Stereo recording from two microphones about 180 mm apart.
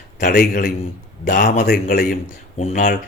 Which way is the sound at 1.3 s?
45° left (ahead or behind).